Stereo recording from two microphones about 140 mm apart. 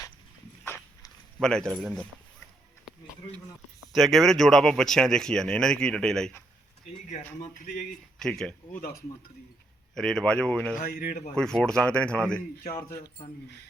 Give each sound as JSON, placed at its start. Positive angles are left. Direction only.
{"t": 0.6, "sound": "dog", "side_deg": 15}
{"t": 1.4, "sound": "speech", "side_deg": 5}
{"t": 3.9, "sound": "speech", "side_deg": 0}
{"t": 7.6, "sound": "speech", "side_deg": 75}
{"t": 8.2, "sound": "speech", "side_deg": 5}
{"t": 9.9, "sound": "speech", "side_deg": 5}
{"t": 10.8, "sound": "speech", "side_deg": 65}
{"t": 11.3, "sound": "speech", "side_deg": 5}